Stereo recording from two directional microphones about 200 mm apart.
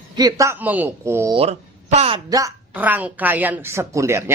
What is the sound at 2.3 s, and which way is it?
A woman's voice, 15° right (ahead or behind).